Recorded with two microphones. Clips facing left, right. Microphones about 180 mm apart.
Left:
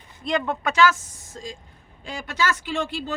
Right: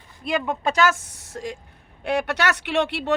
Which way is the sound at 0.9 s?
65° right (ahead or behind).